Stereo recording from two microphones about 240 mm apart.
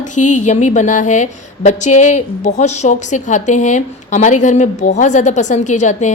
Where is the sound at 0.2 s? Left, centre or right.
Left.